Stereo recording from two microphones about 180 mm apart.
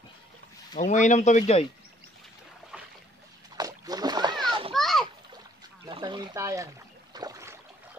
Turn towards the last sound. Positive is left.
turn(degrees=-20)  # may be behind; listen again after turning